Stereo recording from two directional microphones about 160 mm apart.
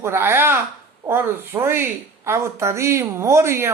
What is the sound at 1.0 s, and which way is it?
Speech, 15° right (ahead or behind).